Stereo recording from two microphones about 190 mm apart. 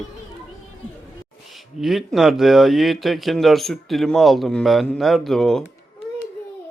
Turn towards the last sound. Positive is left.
turn(degrees=5)  # may be behind; listen again after turning